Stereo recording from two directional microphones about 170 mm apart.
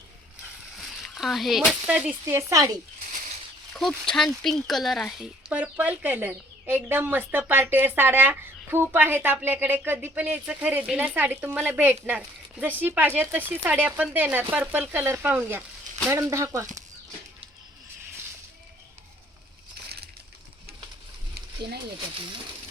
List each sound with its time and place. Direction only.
0.8 s speech: centre (ahead or behind); by 2.8 s 20° right (ahead or behind)
3.8 s speech: centre (ahead or behind); by 16.6 s 15° right (ahead or behind)